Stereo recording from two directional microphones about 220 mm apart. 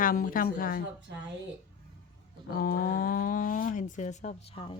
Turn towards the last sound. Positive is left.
turn(degrees=25)  # may be behind; listen again after turning